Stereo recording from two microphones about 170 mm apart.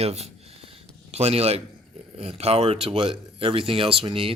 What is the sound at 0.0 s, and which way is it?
Speech, 40° right (ahead or behind).